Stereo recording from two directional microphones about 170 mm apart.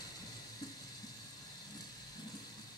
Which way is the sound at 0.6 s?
25° left (ahead or behind).